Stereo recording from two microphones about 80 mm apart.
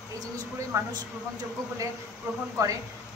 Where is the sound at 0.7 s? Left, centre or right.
Right.